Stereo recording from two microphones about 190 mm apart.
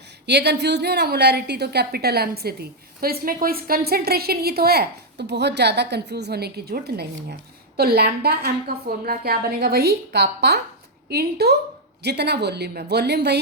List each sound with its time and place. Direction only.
0.3 s a woman's voice: 65° right (ahead or behind)